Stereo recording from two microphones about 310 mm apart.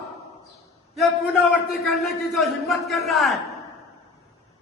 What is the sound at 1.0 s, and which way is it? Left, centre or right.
A man's voice, centre.